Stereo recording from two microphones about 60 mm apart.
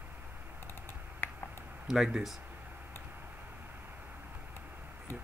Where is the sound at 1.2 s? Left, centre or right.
Left.